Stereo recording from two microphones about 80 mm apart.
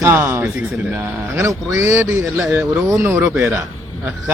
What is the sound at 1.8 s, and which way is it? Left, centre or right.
Speech, right.